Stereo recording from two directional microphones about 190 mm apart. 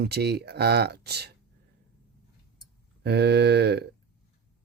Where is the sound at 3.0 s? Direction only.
60° right (ahead or behind).